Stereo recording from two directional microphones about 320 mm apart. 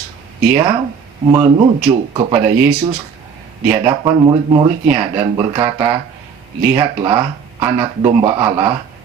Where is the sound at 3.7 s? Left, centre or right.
Centre.